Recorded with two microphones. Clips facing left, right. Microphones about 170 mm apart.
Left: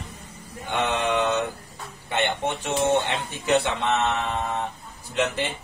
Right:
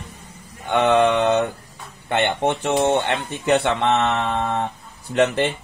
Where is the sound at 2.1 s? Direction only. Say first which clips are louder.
Right 5 dB; 60° right (ahead or behind).